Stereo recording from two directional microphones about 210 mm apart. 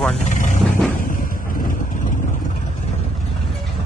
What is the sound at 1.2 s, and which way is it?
Vehicle, 40° left (ahead or behind).